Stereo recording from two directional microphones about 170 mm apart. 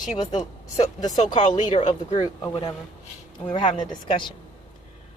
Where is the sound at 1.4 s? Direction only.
45° left (ahead or behind).